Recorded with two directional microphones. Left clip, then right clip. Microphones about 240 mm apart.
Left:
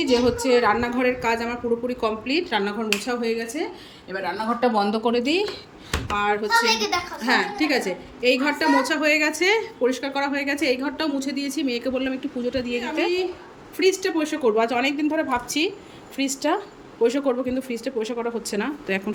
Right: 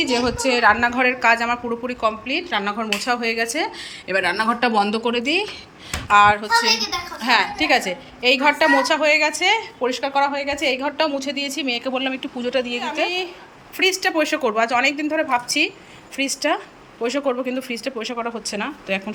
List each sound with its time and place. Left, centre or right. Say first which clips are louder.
0.0 s a woman's voice: right 1 dB; centre
6.7 s a child's voice: left 1 dB; centre
7.2 s a woman's voice: right 5 dB; centre